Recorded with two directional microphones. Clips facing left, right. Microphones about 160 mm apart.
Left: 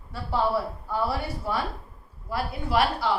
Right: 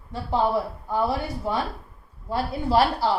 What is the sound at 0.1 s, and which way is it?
A woman's voice, 20° right (ahead or behind).